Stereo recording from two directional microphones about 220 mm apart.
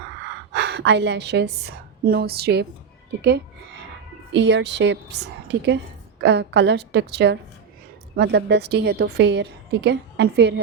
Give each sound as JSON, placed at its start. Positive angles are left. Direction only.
{"t": 0.5, "sound": "a woman's voice", "side_deg": -50}